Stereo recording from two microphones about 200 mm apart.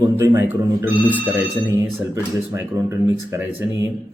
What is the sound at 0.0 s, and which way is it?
Speech, 20° right (ahead or behind).